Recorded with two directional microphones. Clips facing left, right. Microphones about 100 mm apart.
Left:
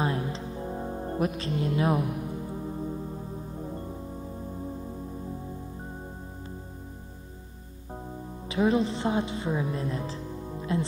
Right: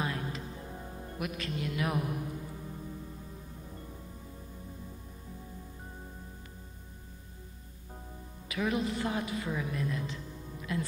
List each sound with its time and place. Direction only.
0.0 s music: 30° left (ahead or behind)
8.5 s speech: 30° left (ahead or behind)